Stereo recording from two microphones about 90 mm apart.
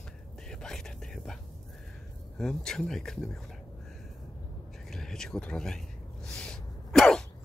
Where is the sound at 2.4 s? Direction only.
5° left (ahead or behind).